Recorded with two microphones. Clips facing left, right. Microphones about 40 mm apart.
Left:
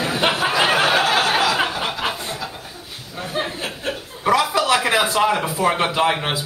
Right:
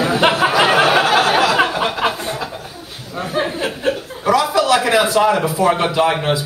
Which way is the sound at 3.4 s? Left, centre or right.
Centre.